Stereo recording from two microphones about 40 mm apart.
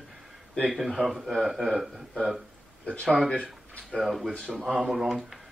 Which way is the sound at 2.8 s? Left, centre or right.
Left.